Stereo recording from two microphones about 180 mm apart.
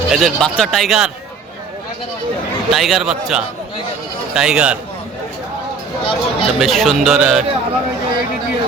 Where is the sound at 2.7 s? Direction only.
Centre (ahead or behind).